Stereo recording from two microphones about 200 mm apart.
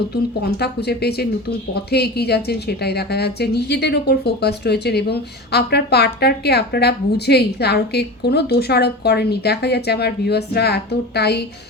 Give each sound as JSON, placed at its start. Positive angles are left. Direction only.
{"t": 0.1, "sound": "speech", "side_deg": 55}